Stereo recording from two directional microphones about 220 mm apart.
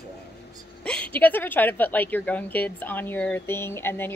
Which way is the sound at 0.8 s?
5° left (ahead or behind).